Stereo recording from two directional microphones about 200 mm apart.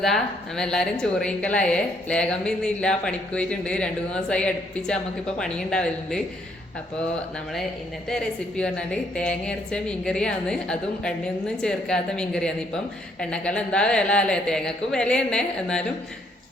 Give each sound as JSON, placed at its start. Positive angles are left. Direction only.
{"t": 0.0, "sound": "a woman's voice", "side_deg": 0}
{"t": 8.1, "sound": "a woman's voice", "side_deg": 5}